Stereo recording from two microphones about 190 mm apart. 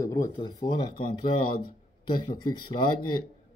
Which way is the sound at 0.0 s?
15° left (ahead or behind).